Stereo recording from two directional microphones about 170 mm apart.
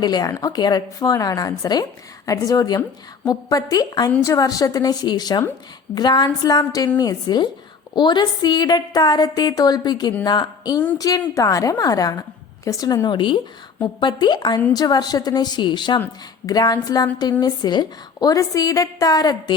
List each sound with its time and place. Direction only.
0.0 s a woman's voice: 25° left (ahead or behind)